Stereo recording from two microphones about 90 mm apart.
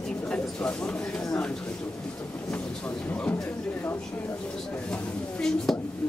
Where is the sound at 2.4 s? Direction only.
15° left (ahead or behind).